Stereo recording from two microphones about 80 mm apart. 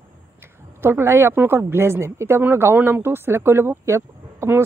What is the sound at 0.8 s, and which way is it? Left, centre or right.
Speech, right.